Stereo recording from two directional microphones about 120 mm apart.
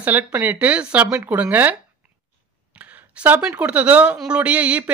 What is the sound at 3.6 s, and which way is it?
Speech, 10° right (ahead or behind).